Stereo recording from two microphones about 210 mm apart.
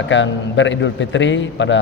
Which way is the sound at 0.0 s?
60° left (ahead or behind).